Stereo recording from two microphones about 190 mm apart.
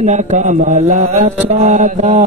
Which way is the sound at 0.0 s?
40° right (ahead or behind).